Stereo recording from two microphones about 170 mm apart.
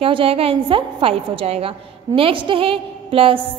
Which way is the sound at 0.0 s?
35° right (ahead or behind).